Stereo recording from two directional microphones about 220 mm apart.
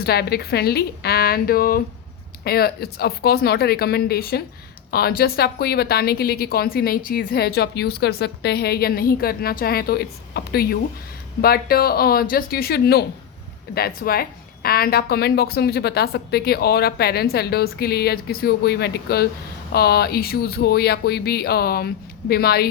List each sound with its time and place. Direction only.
0.0 s a woman's voice: 45° left (ahead or behind)